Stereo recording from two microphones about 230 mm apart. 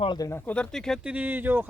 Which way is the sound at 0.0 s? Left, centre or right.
Centre.